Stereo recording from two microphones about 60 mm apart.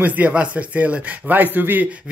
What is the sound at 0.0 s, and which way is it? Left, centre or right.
A man's voice, right.